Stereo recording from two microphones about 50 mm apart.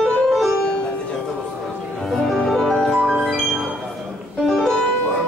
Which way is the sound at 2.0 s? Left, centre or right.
Centre.